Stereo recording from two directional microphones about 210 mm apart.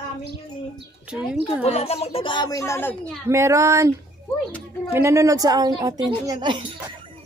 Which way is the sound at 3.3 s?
15° right (ahead or behind).